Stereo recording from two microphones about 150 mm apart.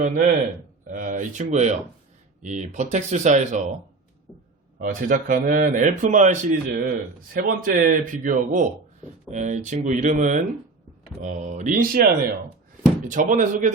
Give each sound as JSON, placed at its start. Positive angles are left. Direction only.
{"t": 0.0, "sound": "speech", "side_deg": -60}
{"t": 4.8, "sound": "a man's voice", "side_deg": -65}
{"t": 7.3, "sound": "speech", "side_deg": -65}
{"t": 13.1, "sound": "speech", "side_deg": -60}